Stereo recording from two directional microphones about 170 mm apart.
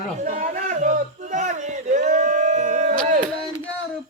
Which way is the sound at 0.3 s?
50° right (ahead or behind).